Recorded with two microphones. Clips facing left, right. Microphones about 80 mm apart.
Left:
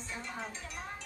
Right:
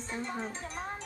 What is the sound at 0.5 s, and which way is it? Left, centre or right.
Speech, right.